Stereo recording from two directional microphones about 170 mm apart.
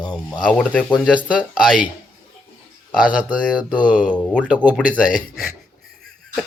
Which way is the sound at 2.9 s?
5° right (ahead or behind).